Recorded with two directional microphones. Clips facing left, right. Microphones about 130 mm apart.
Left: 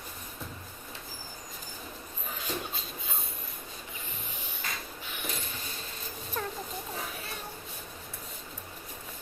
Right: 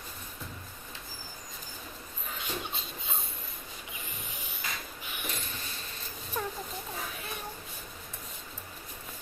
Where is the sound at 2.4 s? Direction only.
25° right (ahead or behind).